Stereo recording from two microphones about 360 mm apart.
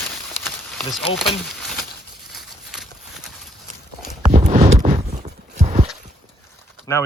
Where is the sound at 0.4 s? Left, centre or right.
Centre.